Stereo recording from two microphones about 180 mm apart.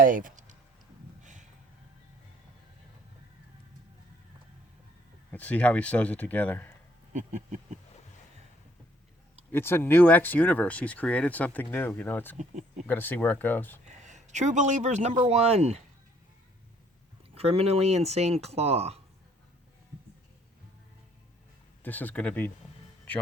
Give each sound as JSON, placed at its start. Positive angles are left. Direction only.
{"t": 0.0, "sound": "a sound", "side_deg": -50}
{"t": 5.3, "sound": "speech", "side_deg": 10}
{"t": 7.1, "sound": "a sound", "side_deg": -40}
{"t": 9.5, "sound": "speech", "side_deg": 10}
{"t": 12.4, "sound": "speech", "side_deg": -40}
{"t": 12.9, "sound": "speech", "side_deg": 10}
{"t": 13.8, "sound": "a sound", "side_deg": -40}
{"t": 15.2, "sound": "speech", "side_deg": -35}
{"t": 17.3, "sound": "speech", "side_deg": -35}
{"t": 21.8, "sound": "speech", "side_deg": 10}